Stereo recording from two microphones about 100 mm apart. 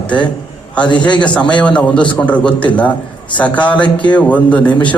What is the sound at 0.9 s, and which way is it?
Speech, 50° left (ahead or behind).